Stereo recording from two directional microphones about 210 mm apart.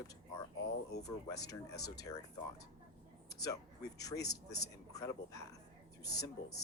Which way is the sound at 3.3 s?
15° left (ahead or behind).